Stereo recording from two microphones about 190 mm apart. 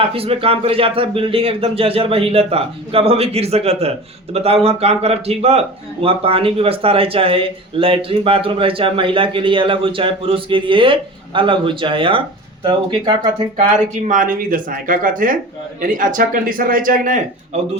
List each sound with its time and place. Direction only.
0.0 s speech: 30° right (ahead or behind)
14.1 s speech: 45° right (ahead or behind)